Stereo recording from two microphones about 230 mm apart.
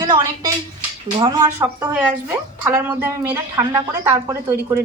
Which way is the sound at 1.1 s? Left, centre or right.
Centre.